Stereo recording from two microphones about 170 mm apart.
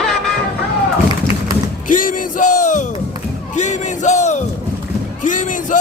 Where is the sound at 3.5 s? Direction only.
45° left (ahead or behind).